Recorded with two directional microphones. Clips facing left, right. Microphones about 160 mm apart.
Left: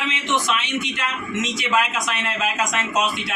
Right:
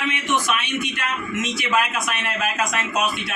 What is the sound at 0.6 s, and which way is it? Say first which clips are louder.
Speech: left 1 dB; 20° left (ahead or behind).